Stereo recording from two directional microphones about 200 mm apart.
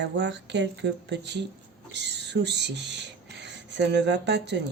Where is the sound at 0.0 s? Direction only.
60° right (ahead or behind).